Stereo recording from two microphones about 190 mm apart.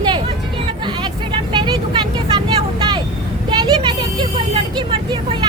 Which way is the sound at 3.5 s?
25° right (ahead or behind).